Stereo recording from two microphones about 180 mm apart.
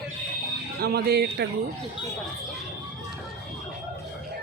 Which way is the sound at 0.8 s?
60° right (ahead or behind).